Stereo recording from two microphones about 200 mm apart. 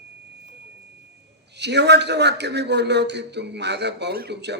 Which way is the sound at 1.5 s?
60° right (ahead or behind).